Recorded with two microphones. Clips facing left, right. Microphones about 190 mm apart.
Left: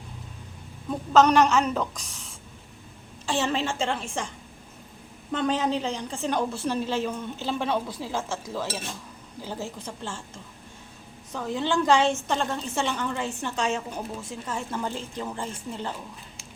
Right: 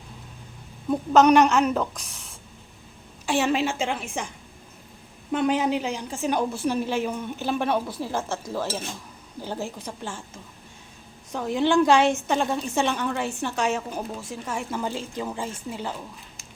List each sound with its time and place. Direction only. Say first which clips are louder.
0.9 s a woman's voice: right 2 dB; 10° right (ahead or behind)
5.3 s a woman's voice: right 3 dB; 10° right (ahead or behind)
9.4 s a woman's voice: right 3 dB; 20° right (ahead or behind)
11.3 s a woman's voice: right 5 dB; 15° right (ahead or behind)